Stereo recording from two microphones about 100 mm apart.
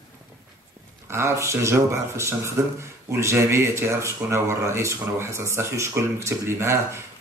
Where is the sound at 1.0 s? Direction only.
25° right (ahead or behind).